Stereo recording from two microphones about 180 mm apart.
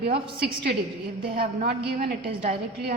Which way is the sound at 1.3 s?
60° right (ahead or behind).